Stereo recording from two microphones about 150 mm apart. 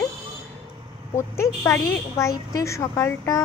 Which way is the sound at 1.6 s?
15° left (ahead or behind).